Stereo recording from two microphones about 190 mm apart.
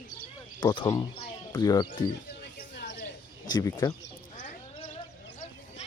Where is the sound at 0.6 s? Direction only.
25° left (ahead or behind).